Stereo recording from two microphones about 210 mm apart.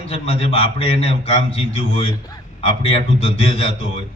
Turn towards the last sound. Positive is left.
turn(degrees=25)  # may be behind; listen again after turning